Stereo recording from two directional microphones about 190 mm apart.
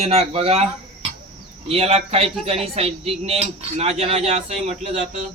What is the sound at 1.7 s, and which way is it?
A man's voice, 30° right (ahead or behind).